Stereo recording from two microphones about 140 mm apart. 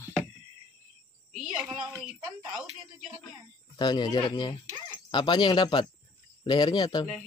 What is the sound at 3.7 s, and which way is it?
Speech, 30° left (ahead or behind).